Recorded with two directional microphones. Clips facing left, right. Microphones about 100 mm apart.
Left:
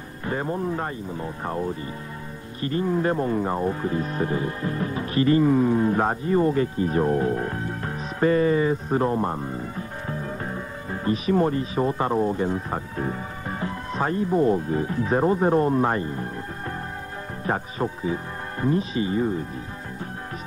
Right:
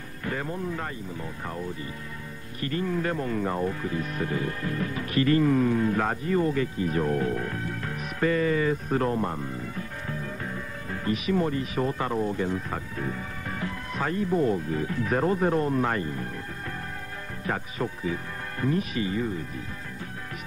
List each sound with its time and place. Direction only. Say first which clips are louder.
0.2 s speech: left 5 dB; 30° left (ahead or behind)
17.5 s speech: left 4 dB; 30° left (ahead or behind)